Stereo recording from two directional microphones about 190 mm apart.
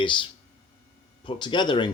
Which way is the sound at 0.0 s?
25° left (ahead or behind).